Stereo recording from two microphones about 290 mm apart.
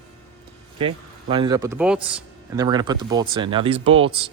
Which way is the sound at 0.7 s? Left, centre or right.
Centre.